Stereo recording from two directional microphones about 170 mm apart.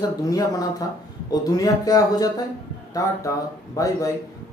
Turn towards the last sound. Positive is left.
turn(degrees=20)  # may be behind; listen again after turning